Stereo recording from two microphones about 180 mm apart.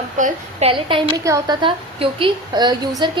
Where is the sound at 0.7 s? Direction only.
30° right (ahead or behind).